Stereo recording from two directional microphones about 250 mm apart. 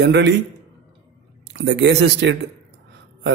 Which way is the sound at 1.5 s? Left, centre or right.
Right.